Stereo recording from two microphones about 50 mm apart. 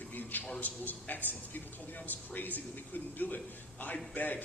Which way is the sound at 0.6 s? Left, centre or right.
Left.